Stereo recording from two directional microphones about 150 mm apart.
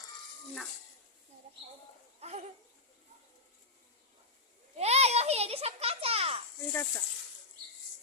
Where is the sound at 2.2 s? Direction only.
45° right (ahead or behind).